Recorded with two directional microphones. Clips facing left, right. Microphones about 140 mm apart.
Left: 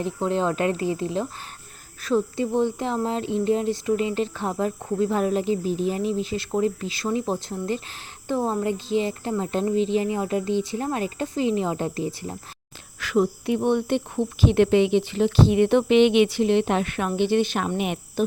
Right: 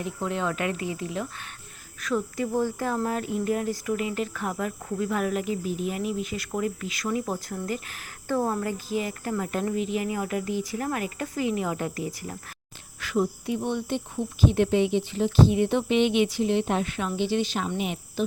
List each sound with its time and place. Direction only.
0.0 s speech: 30° left (ahead or behind)
13.0 s speech: 85° left; by 18.0 s 60° left (ahead or behind)